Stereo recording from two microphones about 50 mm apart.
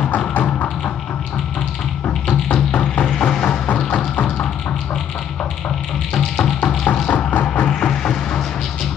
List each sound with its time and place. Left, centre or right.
0.0 s tap: left
2.2 s music: centre
6.3 s music: centre
7.1 s music: left
7.6 s music: centre